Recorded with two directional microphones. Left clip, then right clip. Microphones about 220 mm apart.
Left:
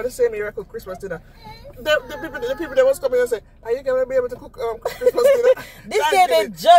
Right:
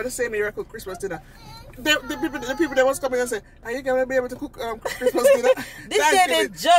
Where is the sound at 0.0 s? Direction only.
20° right (ahead or behind).